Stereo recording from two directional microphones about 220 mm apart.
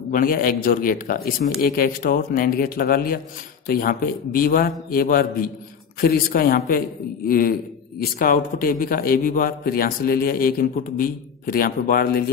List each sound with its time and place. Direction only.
0.1 s a man's voice: 40° left (ahead or behind)